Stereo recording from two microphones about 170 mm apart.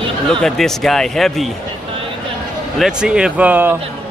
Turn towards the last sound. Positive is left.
turn(degrees=-10)  # may be behind; listen again after turning